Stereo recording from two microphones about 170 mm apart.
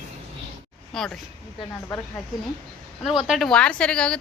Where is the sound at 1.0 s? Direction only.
Centre (ahead or behind).